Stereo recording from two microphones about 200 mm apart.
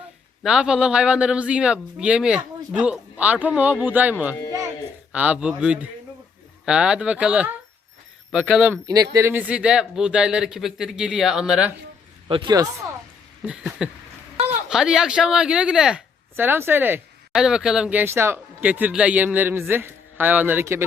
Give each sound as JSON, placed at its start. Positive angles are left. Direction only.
{"t": 0.4, "sound": "speech", "side_deg": -5}
{"t": 8.9, "sound": "speech", "side_deg": -15}
{"t": 12.3, "sound": "speech", "side_deg": -25}
{"t": 13.4, "sound": "speech", "side_deg": -5}